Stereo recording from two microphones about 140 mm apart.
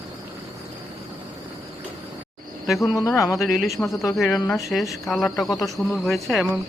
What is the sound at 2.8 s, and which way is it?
Speech, 20° left (ahead or behind).